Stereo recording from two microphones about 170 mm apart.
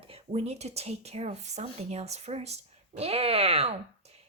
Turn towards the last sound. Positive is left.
turn(degrees=-35)  # may be behind; listen again after turning